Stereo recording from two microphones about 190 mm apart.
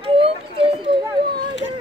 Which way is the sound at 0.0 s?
30° right (ahead or behind).